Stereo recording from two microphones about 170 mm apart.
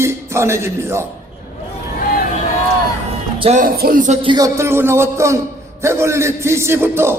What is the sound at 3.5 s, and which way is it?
Speech, 55° right (ahead or behind).